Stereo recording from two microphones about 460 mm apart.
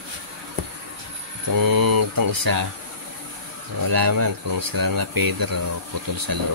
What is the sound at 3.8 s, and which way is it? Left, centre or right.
Speech, right.